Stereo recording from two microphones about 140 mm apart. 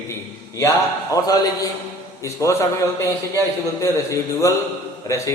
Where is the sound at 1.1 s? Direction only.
25° left (ahead or behind).